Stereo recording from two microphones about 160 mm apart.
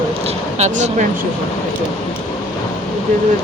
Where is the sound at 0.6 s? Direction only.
45° right (ahead or behind).